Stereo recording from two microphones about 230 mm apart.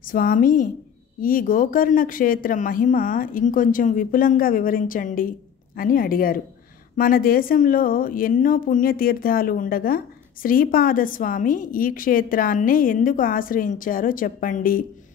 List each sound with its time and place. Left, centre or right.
0.0 s a woman's voice: left